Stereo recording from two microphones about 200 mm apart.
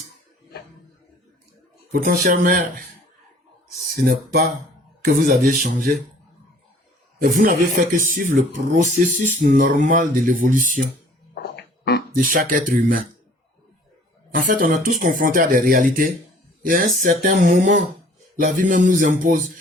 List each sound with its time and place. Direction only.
1.9 s speech: 45° right (ahead or behind)
4.0 s speech: 50° right (ahead or behind)
5.6 s speech: 50° right (ahead or behind)
7.2 s speech: 45° right (ahead or behind)
11.5 s beatboxing: 55° left (ahead or behind)
12.1 s speech: 45° right (ahead or behind)
14.3 s speech: 45° right (ahead or behind)